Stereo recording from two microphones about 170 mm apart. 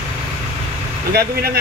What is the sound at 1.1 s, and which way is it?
Speech, 65° right (ahead or behind).